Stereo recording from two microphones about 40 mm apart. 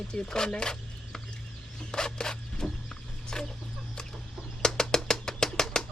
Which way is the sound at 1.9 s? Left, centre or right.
Centre.